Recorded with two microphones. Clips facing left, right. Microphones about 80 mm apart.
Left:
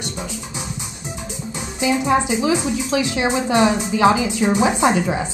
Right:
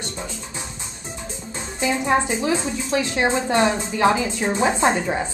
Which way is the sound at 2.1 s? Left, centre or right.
Centre.